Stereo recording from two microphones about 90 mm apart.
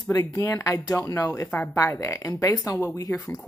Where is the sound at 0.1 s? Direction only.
40° left (ahead or behind).